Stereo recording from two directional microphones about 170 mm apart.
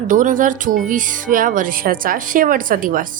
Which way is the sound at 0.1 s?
50° right (ahead or behind).